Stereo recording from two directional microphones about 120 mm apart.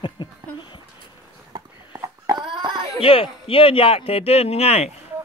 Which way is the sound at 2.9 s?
50° left (ahead or behind).